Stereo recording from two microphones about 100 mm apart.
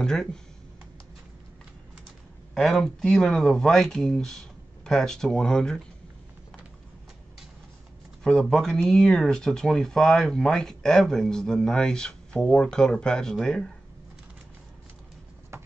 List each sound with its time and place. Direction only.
0.0 s speech: 5° left (ahead or behind)
2.5 s speech: 5° left (ahead or behind)
8.2 s speech: 5° left (ahead or behind)
15.5 s a sound: 25° right (ahead or behind)